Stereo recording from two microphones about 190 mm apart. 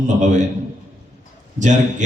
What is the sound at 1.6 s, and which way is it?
Speech, 40° right (ahead or behind).